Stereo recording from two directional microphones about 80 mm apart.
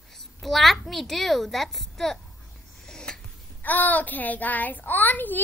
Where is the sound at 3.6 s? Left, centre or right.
Left.